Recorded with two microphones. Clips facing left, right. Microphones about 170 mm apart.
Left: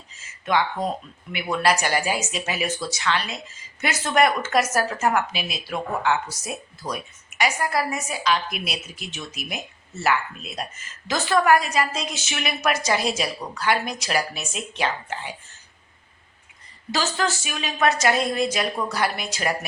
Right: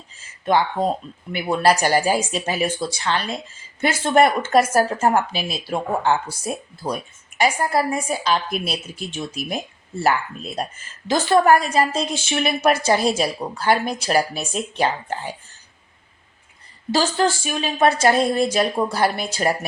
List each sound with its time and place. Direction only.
0.2 s speech: 30° right (ahead or behind)
16.9 s speech: 30° right (ahead or behind)